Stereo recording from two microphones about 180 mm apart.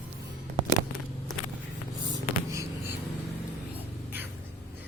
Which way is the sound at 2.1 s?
15° right (ahead or behind).